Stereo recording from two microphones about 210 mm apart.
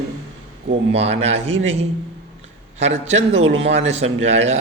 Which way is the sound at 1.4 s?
65° right (ahead or behind).